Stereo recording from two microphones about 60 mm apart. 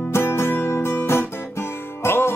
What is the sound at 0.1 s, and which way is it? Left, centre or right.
Music, left.